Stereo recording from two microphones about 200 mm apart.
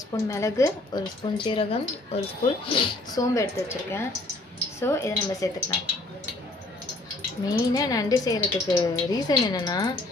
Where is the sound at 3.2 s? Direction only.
15° left (ahead or behind).